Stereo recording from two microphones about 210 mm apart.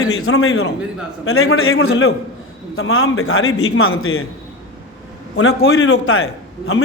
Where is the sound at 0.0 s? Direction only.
90° left.